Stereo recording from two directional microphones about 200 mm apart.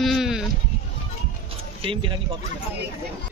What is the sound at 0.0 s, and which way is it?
Sheep, centre (ahead or behind).